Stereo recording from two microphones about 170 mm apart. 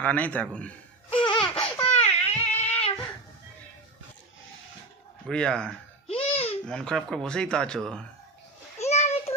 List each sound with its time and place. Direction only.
0.0 s a man's voice: 10° left (ahead or behind)
1.1 s laughter: 30° left (ahead or behind)
2.0 s a sound: 40° left (ahead or behind)
5.2 s speech: 5° left (ahead or behind)
6.1 s babbling: 35° left (ahead or behind)
6.7 s speech: 5° left (ahead or behind)
8.8 s a sound: 40° left (ahead or behind)